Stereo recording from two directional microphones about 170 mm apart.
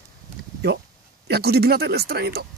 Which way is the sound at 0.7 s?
75° right (ahead or behind).